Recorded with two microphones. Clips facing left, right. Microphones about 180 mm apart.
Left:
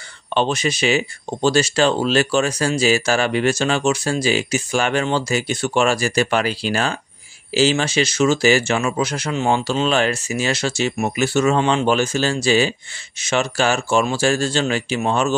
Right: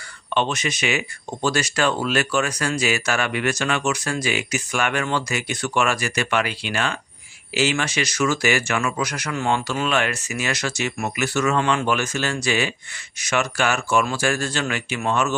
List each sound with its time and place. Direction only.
0.3 s speech: 30° left (ahead or behind)